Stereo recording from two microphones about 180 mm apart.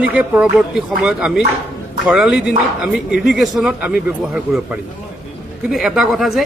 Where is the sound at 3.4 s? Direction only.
5° right (ahead or behind).